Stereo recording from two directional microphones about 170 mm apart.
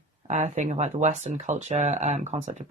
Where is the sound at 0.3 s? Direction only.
45° right (ahead or behind).